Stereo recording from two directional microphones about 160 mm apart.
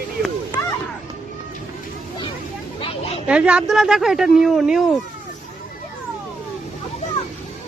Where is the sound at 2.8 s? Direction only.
35° left (ahead or behind).